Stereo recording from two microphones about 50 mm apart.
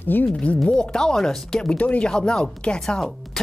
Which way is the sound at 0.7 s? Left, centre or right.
Centre.